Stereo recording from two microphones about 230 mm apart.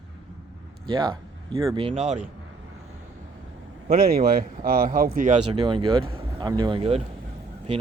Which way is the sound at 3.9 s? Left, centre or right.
Right.